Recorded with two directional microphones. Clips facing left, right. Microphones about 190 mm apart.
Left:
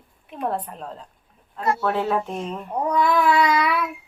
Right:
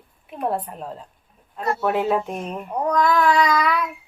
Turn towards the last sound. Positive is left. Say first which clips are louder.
# even
turn(degrees=5)  # may be behind; listen again after turning